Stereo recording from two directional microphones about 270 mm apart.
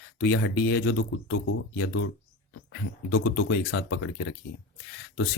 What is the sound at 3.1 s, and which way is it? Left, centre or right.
Speech, left.